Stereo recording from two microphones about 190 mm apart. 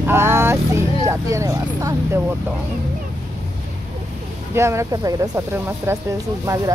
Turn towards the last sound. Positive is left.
turn(degrees=-15)  # may be behind; listen again after turning